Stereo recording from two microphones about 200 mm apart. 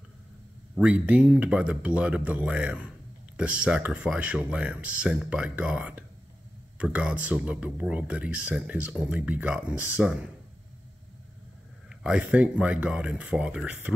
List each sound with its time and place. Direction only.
0.7 s speech: 5° right (ahead or behind)
11.9 s speech: 5° right (ahead or behind)